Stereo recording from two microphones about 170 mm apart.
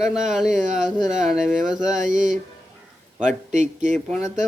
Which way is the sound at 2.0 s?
50° right (ahead or behind).